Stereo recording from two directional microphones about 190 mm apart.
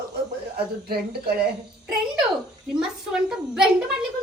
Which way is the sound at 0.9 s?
55° right (ahead or behind).